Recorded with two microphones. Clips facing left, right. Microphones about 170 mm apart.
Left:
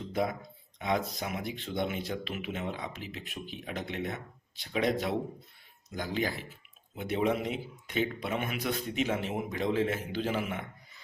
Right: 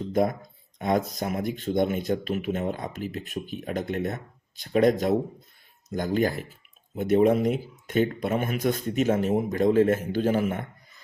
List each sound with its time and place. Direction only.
0.1 s speech: 45° right (ahead or behind)